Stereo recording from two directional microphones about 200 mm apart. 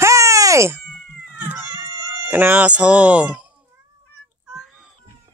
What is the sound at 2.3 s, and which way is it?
Speech, 10° right (ahead or behind).